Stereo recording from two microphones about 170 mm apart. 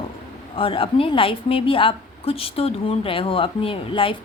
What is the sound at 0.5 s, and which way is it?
A woman's voice, 30° left (ahead or behind).